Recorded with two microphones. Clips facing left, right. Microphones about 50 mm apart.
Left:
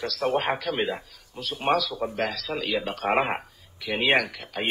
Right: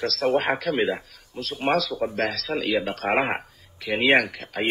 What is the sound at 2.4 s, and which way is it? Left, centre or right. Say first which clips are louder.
A man's voice: right 3 dB; centre.